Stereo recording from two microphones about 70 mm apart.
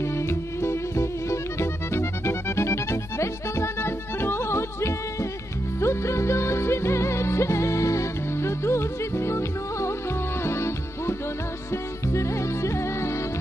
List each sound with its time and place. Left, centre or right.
0.0 s music: left